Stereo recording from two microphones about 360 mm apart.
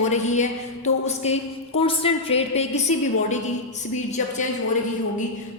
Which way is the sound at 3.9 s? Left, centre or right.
Centre.